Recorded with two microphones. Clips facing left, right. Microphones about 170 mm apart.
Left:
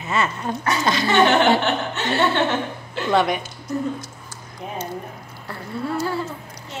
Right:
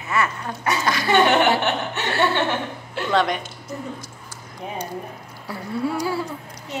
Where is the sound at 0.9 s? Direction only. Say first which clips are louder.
Left 3 dB; 25° left (ahead or behind).